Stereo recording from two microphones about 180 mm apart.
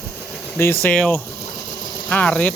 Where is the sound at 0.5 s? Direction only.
10° left (ahead or behind).